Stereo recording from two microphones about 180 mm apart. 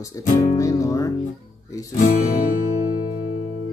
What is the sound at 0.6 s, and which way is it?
Music, 20° left (ahead or behind).